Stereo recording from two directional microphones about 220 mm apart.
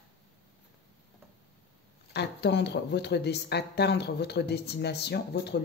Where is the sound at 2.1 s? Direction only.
50° left (ahead or behind).